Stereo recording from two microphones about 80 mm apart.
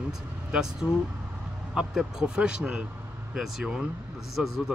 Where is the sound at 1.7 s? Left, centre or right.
Centre.